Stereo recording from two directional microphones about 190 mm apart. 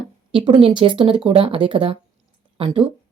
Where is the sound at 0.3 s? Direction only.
25° right (ahead or behind).